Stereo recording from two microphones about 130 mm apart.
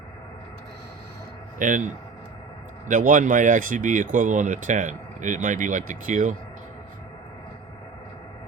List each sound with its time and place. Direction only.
1.5 s speech: 85° right